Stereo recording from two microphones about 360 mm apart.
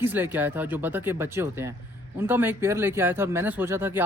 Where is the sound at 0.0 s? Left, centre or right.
Centre.